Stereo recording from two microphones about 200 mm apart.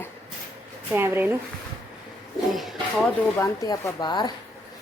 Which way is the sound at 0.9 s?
10° right (ahead or behind).